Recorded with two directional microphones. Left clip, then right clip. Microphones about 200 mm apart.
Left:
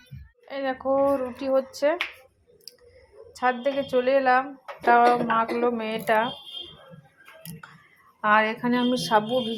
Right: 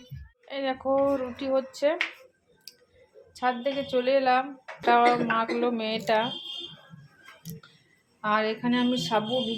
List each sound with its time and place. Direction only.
0.4 s speech: 10° left (ahead or behind)
3.3 s speech: 10° left (ahead or behind)
8.2 s a woman's voice: 15° left (ahead or behind)